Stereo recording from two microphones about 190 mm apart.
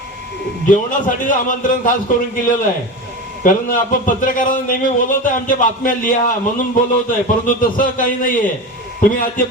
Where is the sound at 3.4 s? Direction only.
45° left (ahead or behind).